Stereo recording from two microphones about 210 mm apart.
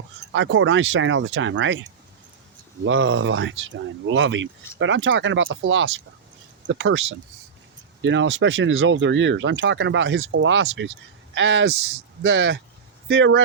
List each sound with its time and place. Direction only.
0.3 s speech: 65° right (ahead or behind)